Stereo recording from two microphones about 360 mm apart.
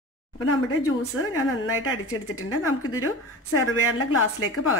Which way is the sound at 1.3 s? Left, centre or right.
Left.